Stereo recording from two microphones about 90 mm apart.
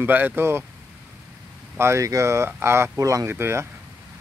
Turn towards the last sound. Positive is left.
turn(degrees=-25)  # may be behind; listen again after turning